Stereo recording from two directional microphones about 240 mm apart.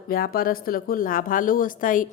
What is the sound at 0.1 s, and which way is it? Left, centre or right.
Speech, left.